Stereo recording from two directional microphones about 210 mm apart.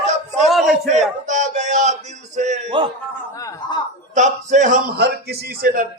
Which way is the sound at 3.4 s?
15° left (ahead or behind).